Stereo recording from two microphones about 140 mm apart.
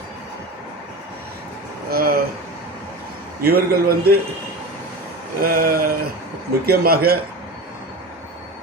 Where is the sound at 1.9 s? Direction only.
90° right.